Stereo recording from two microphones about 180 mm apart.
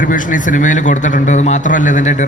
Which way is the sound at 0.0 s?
45° left (ahead or behind).